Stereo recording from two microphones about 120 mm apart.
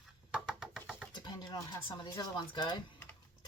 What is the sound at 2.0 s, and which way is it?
Speech, 35° left (ahead or behind).